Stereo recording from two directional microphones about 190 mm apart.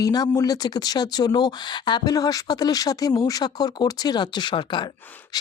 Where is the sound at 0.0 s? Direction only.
20° left (ahead or behind).